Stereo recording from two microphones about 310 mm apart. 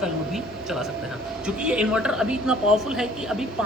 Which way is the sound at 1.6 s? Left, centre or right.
Centre.